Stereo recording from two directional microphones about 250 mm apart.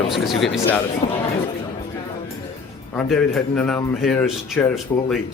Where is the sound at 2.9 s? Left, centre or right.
Centre.